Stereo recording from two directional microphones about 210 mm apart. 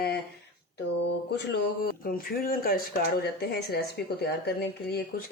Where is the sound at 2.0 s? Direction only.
45° left (ahead or behind).